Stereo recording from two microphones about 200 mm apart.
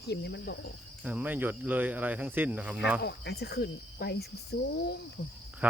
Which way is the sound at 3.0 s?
55° left (ahead or behind).